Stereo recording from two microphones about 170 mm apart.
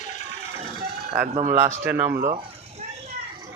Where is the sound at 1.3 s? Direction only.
40° right (ahead or behind).